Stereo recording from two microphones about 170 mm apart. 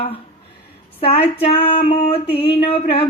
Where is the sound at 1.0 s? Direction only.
35° left (ahead or behind).